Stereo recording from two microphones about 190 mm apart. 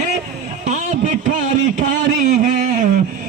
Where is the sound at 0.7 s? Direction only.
45° right (ahead or behind).